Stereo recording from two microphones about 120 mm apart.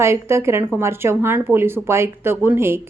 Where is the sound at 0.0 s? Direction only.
20° right (ahead or behind).